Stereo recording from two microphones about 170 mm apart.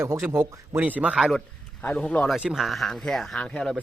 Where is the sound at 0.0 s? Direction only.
15° right (ahead or behind).